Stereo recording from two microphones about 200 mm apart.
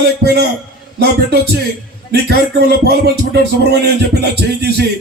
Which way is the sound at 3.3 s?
55° right (ahead or behind).